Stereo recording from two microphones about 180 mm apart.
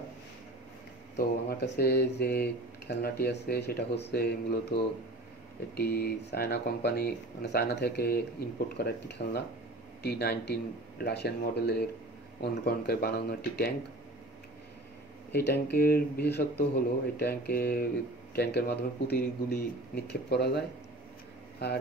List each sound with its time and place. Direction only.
1.1 s speech: 65° left (ahead or behind)
15.3 s speech: 65° left (ahead or behind)